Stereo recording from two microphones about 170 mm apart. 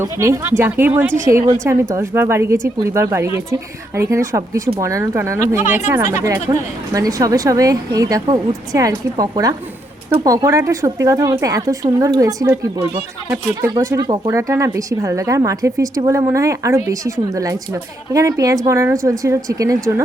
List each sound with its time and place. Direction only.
0.0 s speech: 15° right (ahead or behind)